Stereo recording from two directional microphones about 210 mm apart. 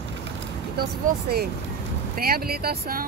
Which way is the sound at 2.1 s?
45° right (ahead or behind).